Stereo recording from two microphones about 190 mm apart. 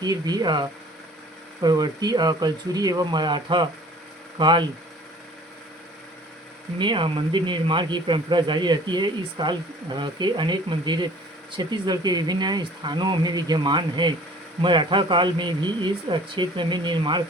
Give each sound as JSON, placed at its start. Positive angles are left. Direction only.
{"t": 0.0, "sound": "speech", "side_deg": -20}
{"t": 6.7, "sound": "speech", "side_deg": -25}